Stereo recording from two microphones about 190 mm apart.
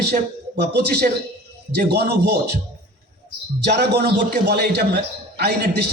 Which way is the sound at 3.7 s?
60° right (ahead or behind).